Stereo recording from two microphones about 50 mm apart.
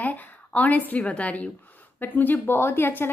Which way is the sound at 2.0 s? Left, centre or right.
Left.